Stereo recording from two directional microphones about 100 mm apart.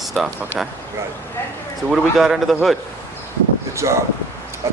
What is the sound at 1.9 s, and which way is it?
Speech, 5° right (ahead or behind).